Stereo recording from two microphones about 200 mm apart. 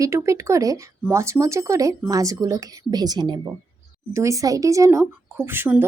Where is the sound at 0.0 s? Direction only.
15° right (ahead or behind).